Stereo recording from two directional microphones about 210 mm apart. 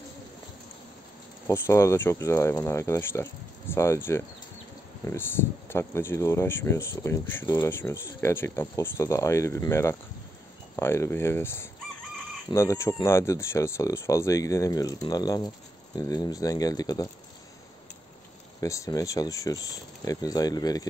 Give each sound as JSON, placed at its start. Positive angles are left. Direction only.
{"t": 1.5, "sound": "speech", "side_deg": 15}
{"t": 18.6, "sound": "speech", "side_deg": 15}